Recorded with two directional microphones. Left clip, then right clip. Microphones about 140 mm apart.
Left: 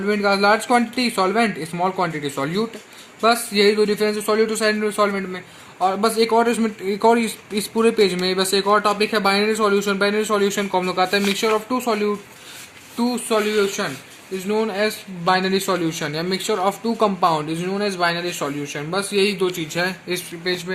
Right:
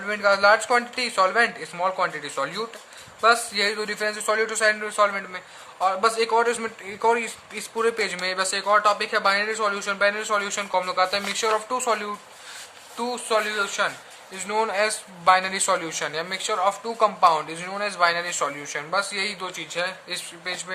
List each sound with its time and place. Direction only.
0.1 s speech: 35° left (ahead or behind)
7.0 s speech: 50° left (ahead or behind); by 13.9 s 25° left (ahead or behind)
14.4 s a man's voice: 15° left (ahead or behind); by 17.1 s 40° left (ahead or behind)
17.6 s speech: 30° left (ahead or behind)